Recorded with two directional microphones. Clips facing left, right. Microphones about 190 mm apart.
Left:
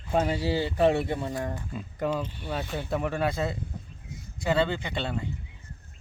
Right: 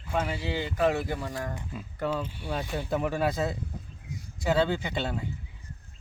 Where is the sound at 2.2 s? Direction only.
10° right (ahead or behind).